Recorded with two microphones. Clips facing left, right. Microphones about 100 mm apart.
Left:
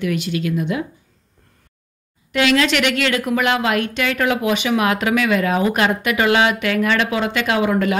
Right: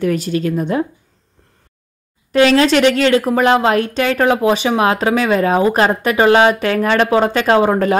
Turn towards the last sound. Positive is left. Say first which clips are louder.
# right 5 dB
turn(degrees=-35)  # may be behind; listen again after turning